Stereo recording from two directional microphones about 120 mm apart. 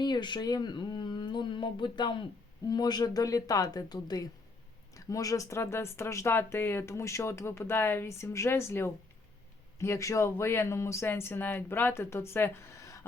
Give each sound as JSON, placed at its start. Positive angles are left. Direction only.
{"t": 0.0, "sound": "speech", "side_deg": 40}